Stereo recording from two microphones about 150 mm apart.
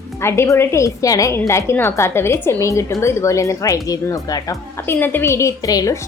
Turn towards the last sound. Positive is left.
turn(degrees=25)  # may be behind; listen again after turning